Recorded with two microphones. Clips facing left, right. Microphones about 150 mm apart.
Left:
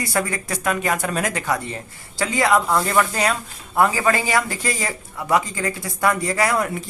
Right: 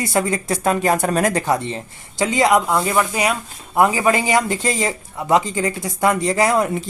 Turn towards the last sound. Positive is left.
turn(degrees=-25)  # may be behind; listen again after turning